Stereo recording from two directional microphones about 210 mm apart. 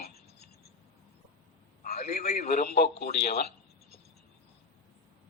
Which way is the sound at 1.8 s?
30° left (ahead or behind).